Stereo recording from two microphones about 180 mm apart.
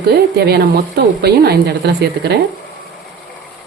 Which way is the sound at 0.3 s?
60° right (ahead or behind).